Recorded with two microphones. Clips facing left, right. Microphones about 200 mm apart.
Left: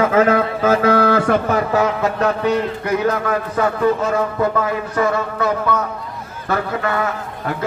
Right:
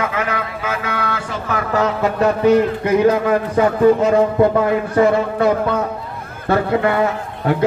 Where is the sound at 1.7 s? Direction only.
10° left (ahead or behind).